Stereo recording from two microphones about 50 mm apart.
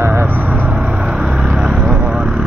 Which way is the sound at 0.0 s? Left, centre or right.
Right.